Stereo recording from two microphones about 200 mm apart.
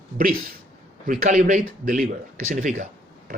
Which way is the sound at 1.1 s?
40° right (ahead or behind).